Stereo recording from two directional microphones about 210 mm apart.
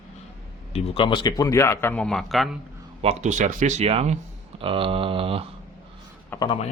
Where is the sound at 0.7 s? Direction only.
25° left (ahead or behind); by 2.6 s centre (ahead or behind).